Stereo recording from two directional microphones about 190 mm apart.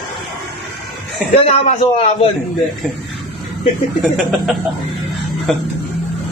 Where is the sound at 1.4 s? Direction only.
35° left (ahead or behind).